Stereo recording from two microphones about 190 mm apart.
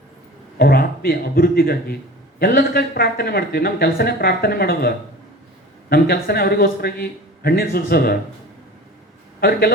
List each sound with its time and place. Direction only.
0.6 s speech: 55° left (ahead or behind)
5.9 s speech: 55° left (ahead or behind)
9.4 s speech: 55° left (ahead or behind)